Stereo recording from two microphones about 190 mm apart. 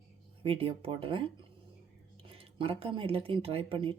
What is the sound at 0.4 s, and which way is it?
Speech, 30° right (ahead or behind).